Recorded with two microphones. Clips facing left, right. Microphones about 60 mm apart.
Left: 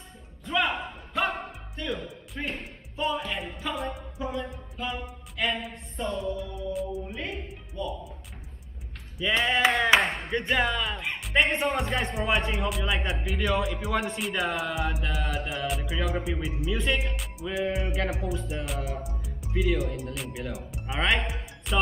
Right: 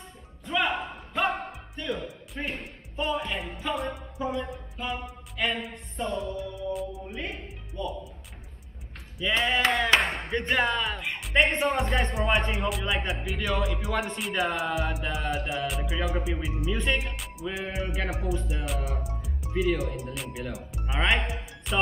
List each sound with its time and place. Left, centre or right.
0.5 s a sound: centre
2.0 s speech: centre
7.8 s speech: centre
9.2 s speech: centre
21.7 s music: centre